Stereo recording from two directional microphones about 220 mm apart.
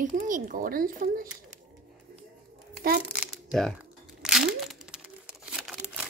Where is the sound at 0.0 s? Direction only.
35° right (ahead or behind).